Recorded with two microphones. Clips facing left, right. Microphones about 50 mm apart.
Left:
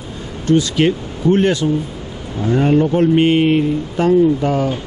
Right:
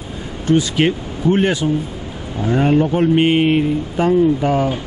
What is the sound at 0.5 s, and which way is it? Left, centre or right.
Speech, centre.